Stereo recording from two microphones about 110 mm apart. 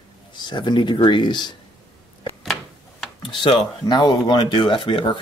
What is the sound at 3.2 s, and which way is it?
Speech, 45° left (ahead or behind).